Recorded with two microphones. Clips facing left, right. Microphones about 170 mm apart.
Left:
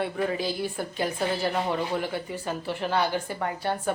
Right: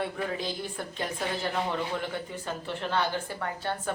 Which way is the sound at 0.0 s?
5° left (ahead or behind).